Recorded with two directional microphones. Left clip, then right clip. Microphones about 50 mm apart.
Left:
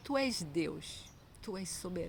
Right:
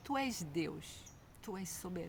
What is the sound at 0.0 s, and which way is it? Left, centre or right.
Speech, right.